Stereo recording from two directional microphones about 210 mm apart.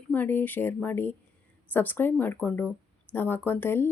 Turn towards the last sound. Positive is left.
turn(degrees=10)  # may be behind; listen again after turning